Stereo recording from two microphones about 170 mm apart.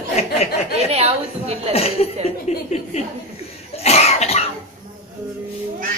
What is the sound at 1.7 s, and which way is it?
Speech, 35° left (ahead or behind).